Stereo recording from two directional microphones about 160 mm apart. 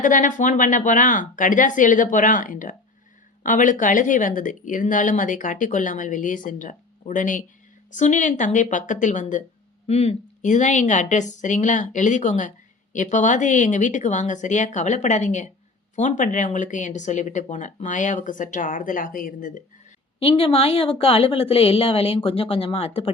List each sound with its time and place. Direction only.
0.0 s a woman's voice: 55° left (ahead or behind)
20.1 s a woman's voice: 35° left (ahead or behind)